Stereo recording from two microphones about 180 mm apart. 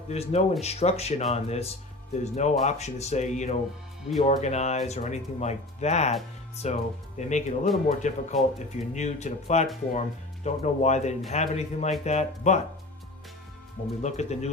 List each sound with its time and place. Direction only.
0.1 s speech: 35° left (ahead or behind)
14.0 s speech: 40° left (ahead or behind)